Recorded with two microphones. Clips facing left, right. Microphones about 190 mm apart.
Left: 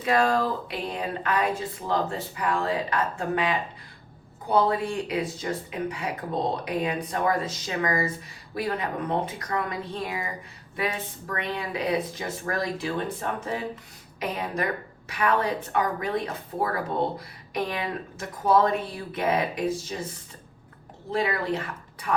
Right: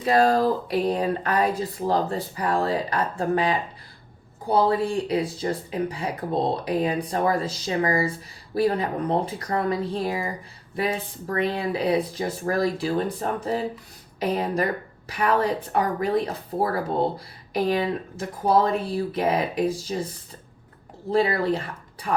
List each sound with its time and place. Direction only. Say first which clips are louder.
0.0 s speech: right 4 dB; 35° right (ahead or behind)
21.1 s speech: right 5 dB; 35° right (ahead or behind)